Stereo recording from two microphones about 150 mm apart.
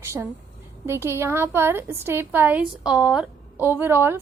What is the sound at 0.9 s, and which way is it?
A woman's voice, 15° right (ahead or behind).